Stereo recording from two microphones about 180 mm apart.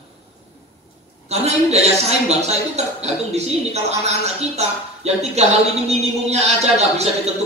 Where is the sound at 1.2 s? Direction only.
35° right (ahead or behind).